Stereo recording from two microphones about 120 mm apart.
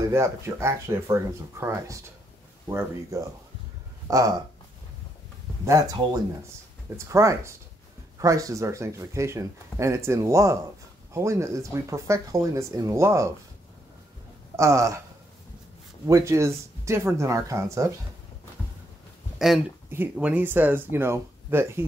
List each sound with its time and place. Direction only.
0.1 s speech: 25° right (ahead or behind)
5.7 s speech: 30° right (ahead or behind)
14.6 s speech: 25° right (ahead or behind)
16.1 s speech: 25° right (ahead or behind)
19.3 s a sound: centre (ahead or behind)
19.9 s speech: 15° right (ahead or behind)